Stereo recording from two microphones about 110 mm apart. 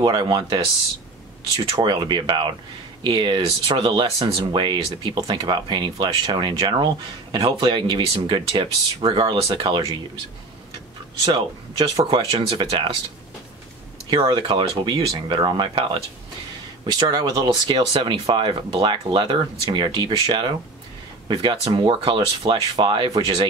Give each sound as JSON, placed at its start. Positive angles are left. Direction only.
{"t": 0.0, "sound": "speech", "side_deg": -40}
{"t": 1.8, "sound": "speech", "side_deg": -45}
{"t": 12.1, "sound": "speech", "side_deg": -55}
{"t": 14.1, "sound": "speech", "side_deg": -45}
{"t": 15.2, "sound": "speech", "side_deg": -45}